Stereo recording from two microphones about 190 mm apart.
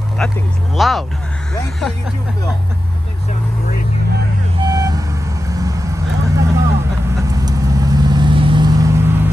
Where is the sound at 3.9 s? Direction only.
60° right (ahead or behind).